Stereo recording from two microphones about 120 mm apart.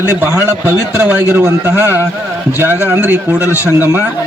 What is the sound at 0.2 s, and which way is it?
A man's voice, 15° right (ahead or behind).